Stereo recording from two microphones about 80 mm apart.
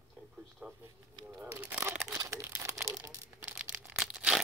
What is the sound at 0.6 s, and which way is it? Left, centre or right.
Speech, right.